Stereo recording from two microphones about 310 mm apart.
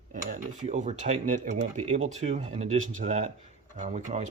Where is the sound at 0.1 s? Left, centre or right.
Right.